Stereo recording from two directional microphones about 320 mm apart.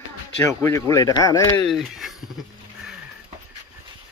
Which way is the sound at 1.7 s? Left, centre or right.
Centre.